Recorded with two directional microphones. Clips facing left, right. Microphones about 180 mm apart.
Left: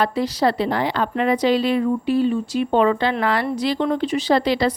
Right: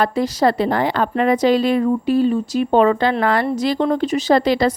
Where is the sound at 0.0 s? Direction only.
45° right (ahead or behind).